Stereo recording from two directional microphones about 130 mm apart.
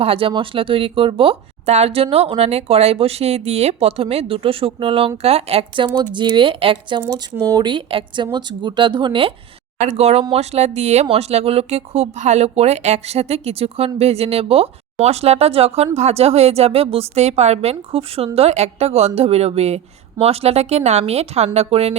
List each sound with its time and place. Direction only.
0.0 s speech: 45° right (ahead or behind)
7.1 s speech: 25° right (ahead or behind)
7.6 s speech: 40° right (ahead or behind)
9.8 s speech: 55° right (ahead or behind)